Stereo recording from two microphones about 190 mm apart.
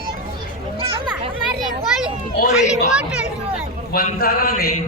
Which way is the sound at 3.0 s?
5° right (ahead or behind).